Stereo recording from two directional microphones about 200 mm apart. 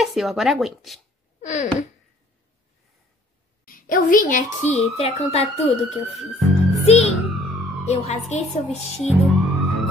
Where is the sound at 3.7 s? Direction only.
45° left (ahead or behind).